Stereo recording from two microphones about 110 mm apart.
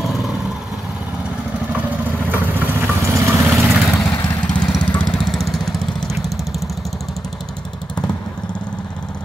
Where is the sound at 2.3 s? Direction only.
20° right (ahead or behind).